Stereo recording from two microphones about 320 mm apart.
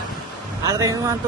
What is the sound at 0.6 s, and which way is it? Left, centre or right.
Speech, centre.